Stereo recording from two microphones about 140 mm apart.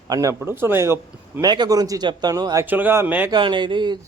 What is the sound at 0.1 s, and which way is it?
Speech, 25° right (ahead or behind).